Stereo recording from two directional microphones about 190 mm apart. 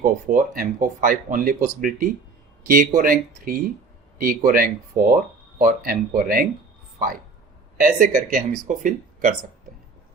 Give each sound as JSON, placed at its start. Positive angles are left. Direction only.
{"t": 0.0, "sound": "speech", "side_deg": -45}
{"t": 7.8, "sound": "speech", "side_deg": -45}